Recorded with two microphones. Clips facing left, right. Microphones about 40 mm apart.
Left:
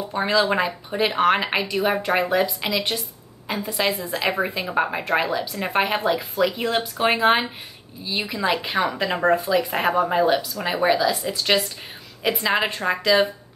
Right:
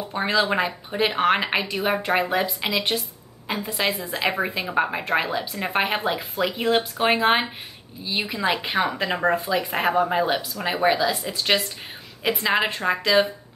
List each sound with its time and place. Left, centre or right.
0.1 s a woman's voice: centre
5.7 s a woman's voice: centre